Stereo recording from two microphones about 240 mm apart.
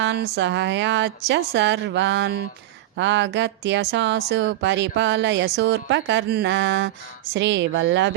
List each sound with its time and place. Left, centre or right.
0.0 s speech: right